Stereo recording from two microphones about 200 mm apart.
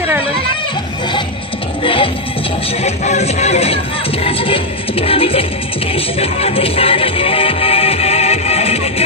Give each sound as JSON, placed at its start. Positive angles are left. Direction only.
{"t": 1.8, "sound": "music", "side_deg": 25}
{"t": 2.8, "sound": "speech", "side_deg": 35}
{"t": 5.9, "sound": "music", "side_deg": 30}